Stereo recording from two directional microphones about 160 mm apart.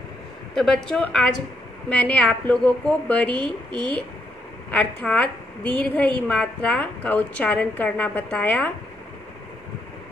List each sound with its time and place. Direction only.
0.6 s a woman's voice: 5° left (ahead or behind)
4.6 s a woman's voice: 10° left (ahead or behind)